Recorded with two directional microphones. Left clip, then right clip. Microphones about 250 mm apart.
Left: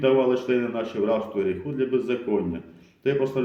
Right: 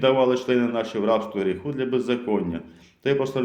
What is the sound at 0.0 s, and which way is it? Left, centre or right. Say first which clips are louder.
Speech: right 1 dB; right.